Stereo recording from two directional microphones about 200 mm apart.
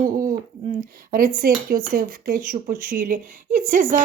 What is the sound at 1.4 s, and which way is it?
A woman's voice, 45° right (ahead or behind).